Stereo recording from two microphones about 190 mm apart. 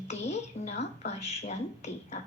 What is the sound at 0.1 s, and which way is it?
A woman's voice, 35° left (ahead or behind).